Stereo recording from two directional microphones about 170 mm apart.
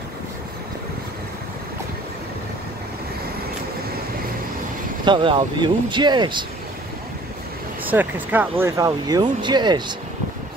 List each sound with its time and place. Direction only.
5.0 s speech: 30° right (ahead or behind)
7.8 s speech: 10° right (ahead or behind); by 9.9 s 25° right (ahead or behind)